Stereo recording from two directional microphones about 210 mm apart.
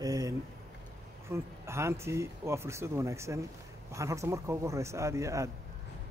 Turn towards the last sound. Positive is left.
turn(degrees=-15)  # may be behind; listen again after turning